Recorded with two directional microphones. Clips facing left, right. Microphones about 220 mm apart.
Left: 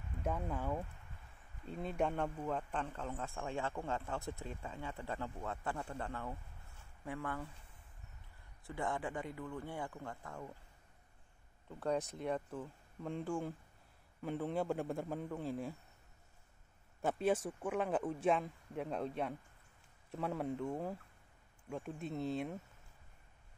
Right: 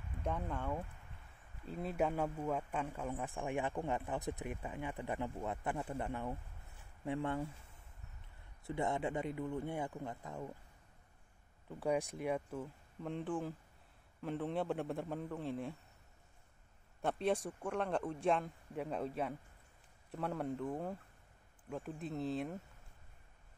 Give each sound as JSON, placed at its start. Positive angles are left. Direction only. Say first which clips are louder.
{"t": 0.2, "sound": "a man's voice", "louder": "left 1 dB", "side_deg": 5}
{"t": 8.6, "sound": "a man's voice", "louder": "right 3 dB", "side_deg": -20}
{"t": 11.8, "sound": "a man's voice", "louder": "right 1 dB", "side_deg": -15}
{"t": 17.0, "sound": "speech", "louder": "left 1 dB", "side_deg": 0}